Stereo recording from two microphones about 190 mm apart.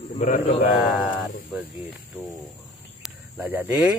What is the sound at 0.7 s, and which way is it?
Speech, 10° right (ahead or behind).